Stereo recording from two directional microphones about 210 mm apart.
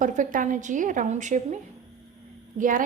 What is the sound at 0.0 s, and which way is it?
A woman's voice, 40° right (ahead or behind).